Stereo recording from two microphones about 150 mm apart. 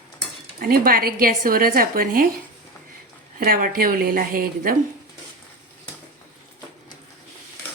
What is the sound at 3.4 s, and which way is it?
A woman's voice, 70° right (ahead or behind).